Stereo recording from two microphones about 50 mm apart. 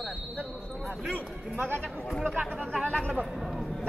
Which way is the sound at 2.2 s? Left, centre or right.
Right.